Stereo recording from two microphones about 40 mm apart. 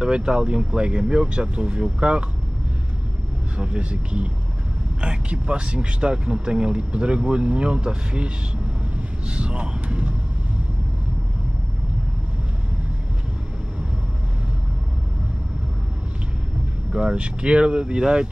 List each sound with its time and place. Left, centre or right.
0.0 s speech: right
3.5 s speech: right
9.3 s vehicle: right
16.9 s speech: right